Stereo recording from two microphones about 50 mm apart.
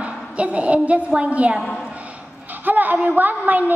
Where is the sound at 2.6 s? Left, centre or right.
Right.